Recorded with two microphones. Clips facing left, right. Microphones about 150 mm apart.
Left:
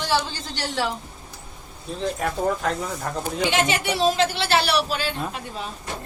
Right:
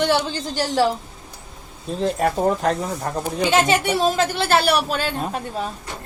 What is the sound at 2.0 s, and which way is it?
Speech, 40° right (ahead or behind).